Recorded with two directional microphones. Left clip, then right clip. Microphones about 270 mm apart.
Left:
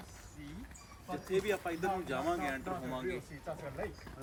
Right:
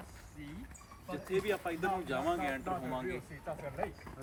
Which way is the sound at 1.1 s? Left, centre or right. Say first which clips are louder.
Even; centre.